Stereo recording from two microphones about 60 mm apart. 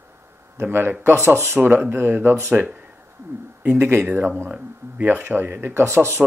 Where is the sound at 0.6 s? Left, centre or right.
Right.